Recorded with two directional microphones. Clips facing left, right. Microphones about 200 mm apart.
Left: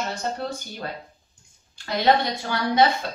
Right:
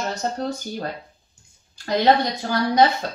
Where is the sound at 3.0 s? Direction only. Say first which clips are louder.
Right 2 dB; 40° right (ahead or behind).